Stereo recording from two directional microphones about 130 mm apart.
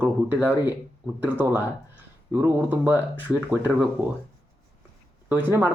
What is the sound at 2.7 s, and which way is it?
A man's voice, 15° right (ahead or behind).